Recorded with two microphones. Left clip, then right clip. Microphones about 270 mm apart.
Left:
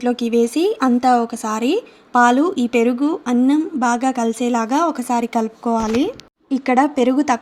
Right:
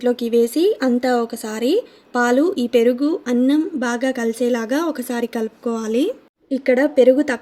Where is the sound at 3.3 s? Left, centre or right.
Centre.